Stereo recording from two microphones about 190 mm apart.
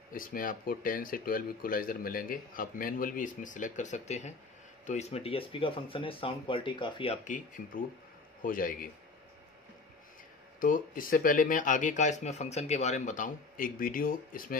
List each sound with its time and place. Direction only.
0.1 s speech: 45° left (ahead or behind); by 7.2 s 25° left (ahead or behind)
7.2 s speech: 45° left (ahead or behind)
10.6 s speech: 45° left (ahead or behind)